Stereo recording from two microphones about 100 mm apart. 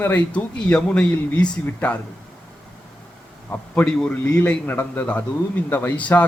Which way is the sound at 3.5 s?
15° left (ahead or behind).